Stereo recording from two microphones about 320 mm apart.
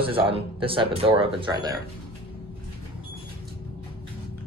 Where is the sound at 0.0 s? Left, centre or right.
Centre.